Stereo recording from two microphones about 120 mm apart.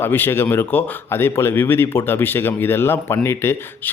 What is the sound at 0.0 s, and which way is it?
Speech, 20° left (ahead or behind).